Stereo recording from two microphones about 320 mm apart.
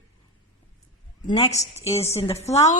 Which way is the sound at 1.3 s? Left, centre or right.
Centre.